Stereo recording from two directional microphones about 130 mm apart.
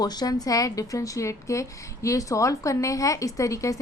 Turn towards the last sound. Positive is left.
turn(degrees=25)  # may be behind; listen again after turning